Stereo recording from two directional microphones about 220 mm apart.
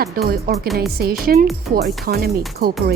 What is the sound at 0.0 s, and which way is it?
Speech, 45° right (ahead or behind).